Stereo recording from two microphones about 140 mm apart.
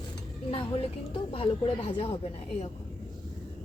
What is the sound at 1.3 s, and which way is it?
Speech, 40° left (ahead or behind).